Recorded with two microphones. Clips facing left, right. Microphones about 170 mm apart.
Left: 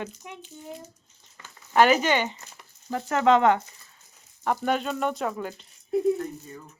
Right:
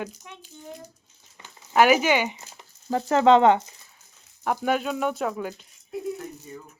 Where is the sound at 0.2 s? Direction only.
15° left (ahead or behind).